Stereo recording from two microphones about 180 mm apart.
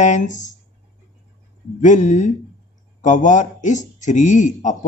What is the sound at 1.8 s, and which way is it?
A man's voice, 40° left (ahead or behind).